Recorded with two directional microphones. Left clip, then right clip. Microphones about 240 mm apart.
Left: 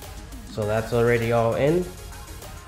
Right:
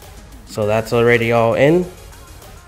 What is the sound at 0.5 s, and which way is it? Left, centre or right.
Speech, right.